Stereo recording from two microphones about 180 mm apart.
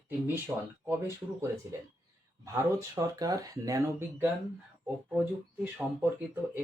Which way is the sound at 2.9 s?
20° right (ahead or behind).